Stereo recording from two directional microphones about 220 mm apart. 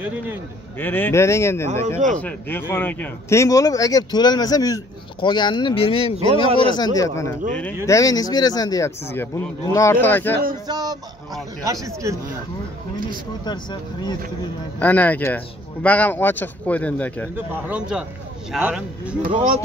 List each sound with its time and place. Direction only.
0.0 s speech: 5° right (ahead or behind)
0.7 s a man's voice: 10° left (ahead or behind)
2.0 s speech: 35° right (ahead or behind)
2.2 s a man's voice: 10° left (ahead or behind); by 6.1 s 25° left (ahead or behind)
6.4 s speech: 25° right (ahead or behind)
6.7 s a man's voice: 15° left (ahead or behind)
10.7 s speech: 15° right (ahead or behind)
13.5 s speech: 20° left (ahead or behind)
14.8 s a man's voice: 10° left (ahead or behind)
17.6 s speech: 5° right (ahead or behind)